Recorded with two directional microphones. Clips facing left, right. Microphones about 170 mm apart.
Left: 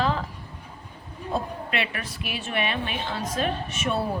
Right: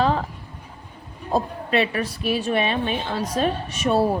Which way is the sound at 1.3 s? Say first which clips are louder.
Right 6 dB; 35° right (ahead or behind).